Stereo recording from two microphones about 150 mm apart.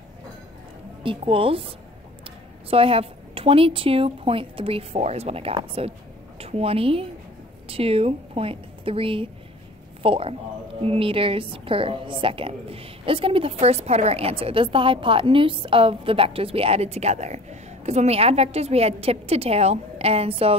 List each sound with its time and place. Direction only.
1.0 s a woman's voice: 35° right (ahead or behind)